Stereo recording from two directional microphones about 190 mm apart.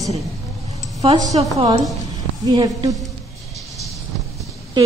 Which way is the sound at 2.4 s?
20° right (ahead or behind).